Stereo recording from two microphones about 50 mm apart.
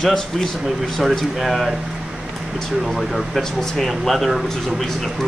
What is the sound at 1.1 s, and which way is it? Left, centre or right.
Speech, centre.